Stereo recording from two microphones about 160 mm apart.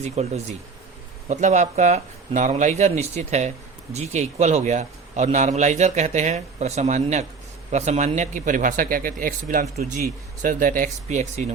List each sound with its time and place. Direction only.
0.0 s a man's voice: 45° right (ahead or behind)